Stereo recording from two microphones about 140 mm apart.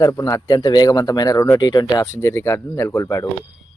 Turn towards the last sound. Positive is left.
turn(degrees=20)  # may be behind; listen again after turning